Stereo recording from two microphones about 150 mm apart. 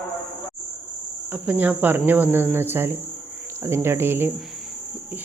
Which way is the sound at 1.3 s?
10° right (ahead or behind).